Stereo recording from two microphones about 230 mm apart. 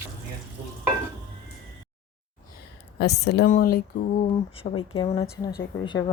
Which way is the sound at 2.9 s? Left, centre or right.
Left.